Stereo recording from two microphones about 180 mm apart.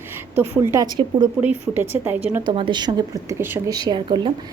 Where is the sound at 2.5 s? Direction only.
25° right (ahead or behind).